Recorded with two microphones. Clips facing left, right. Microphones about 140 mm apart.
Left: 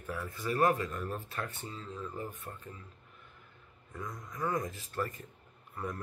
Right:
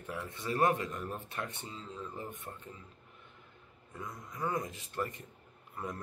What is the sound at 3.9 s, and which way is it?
Speech, 25° right (ahead or behind).